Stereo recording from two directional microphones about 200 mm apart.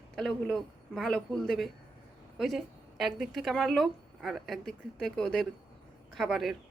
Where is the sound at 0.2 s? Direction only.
Centre (ahead or behind).